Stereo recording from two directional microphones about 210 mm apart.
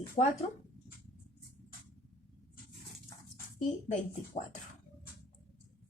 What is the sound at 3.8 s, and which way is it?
Speech, 35° left (ahead or behind).